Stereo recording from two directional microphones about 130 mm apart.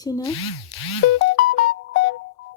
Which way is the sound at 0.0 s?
30° left (ahead or behind).